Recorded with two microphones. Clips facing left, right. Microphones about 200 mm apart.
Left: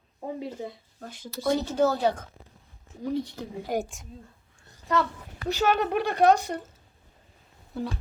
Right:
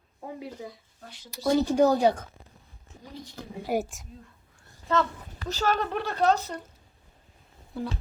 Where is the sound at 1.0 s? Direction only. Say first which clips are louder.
Left 7 dB; 50° left (ahead or behind).